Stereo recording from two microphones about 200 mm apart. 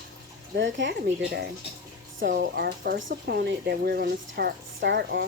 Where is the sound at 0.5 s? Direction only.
65° right (ahead or behind).